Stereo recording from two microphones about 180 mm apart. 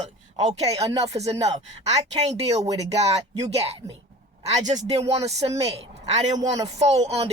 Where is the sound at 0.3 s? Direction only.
35° right (ahead or behind).